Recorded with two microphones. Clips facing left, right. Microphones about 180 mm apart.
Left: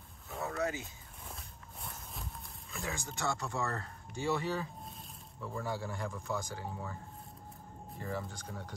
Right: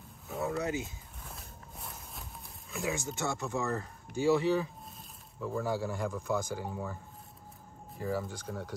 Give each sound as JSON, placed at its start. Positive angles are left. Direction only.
{"t": 0.5, "sound": "speech", "side_deg": -20}
{"t": 1.3, "sound": "walk", "side_deg": 0}
{"t": 2.7, "sound": "speech", "side_deg": -5}